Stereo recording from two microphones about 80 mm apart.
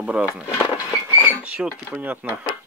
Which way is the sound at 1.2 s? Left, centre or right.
Centre.